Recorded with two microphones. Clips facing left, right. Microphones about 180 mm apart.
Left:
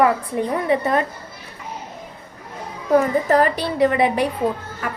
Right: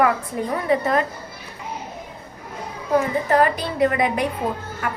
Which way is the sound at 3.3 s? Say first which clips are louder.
Right 1 dB; 35° left (ahead or behind).